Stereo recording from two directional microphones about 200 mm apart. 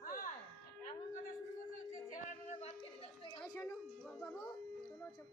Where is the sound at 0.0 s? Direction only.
45° left (ahead or behind).